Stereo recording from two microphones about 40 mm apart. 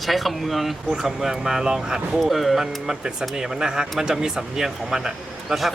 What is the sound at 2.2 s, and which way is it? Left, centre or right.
Speech, centre.